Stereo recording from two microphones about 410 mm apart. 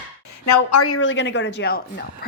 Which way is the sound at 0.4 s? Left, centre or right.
Left.